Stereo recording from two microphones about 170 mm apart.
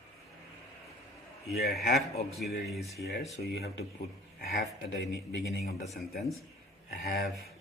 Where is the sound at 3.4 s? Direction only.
70° left (ahead or behind).